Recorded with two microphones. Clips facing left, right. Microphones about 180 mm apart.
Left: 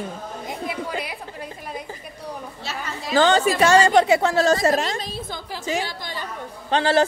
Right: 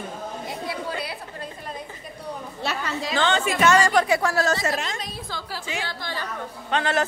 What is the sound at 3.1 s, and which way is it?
A woman's voice, 40° left (ahead or behind).